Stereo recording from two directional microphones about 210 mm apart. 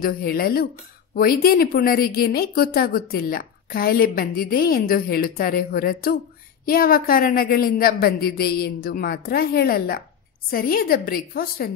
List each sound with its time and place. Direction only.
0.0 s a woman's voice: 45° left (ahead or behind)